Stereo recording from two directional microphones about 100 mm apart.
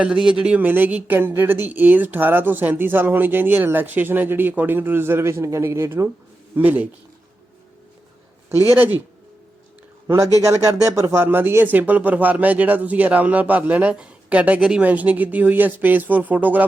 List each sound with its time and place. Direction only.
0.0 s speech: 10° right (ahead or behind); by 6.1 s 25° right (ahead or behind)
6.6 s speech: 15° right (ahead or behind)
8.4 s speech: 25° right (ahead or behind)
10.4 s speech: 30° right (ahead or behind)